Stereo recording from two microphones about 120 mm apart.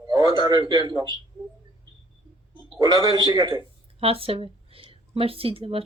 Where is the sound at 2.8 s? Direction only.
30° right (ahead or behind).